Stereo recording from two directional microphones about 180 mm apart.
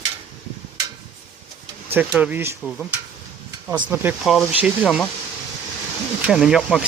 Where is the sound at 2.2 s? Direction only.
10° right (ahead or behind).